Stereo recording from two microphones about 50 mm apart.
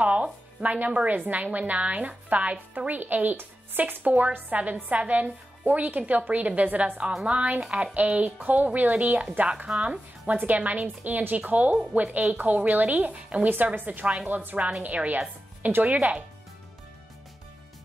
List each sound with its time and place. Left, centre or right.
0.0 s a woman's voice: right
10.3 s a woman's voice: right